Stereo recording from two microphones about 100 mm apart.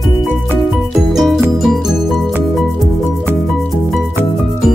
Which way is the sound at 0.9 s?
Centre (ahead or behind).